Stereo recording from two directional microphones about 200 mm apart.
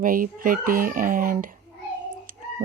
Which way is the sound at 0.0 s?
45° right (ahead or behind).